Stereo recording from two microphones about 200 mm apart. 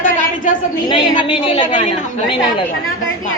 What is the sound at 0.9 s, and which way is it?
A man's voice, 25° left (ahead or behind).